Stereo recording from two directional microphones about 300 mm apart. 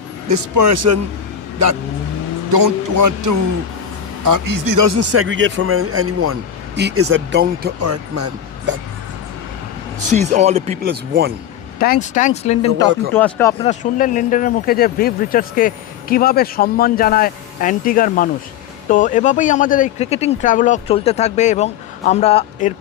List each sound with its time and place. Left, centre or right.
0.3 s speech: right
2.6 s music: right
4.3 s speech: right
6.7 s speech: right
7.8 s speech: right
10.1 s speech: right
11.8 s speech: left
13.1 s speech: centre
13.7 s speech: left